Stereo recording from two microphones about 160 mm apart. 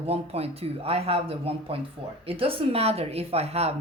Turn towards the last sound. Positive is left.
turn(degrees=-40)  # may be behind; listen again after turning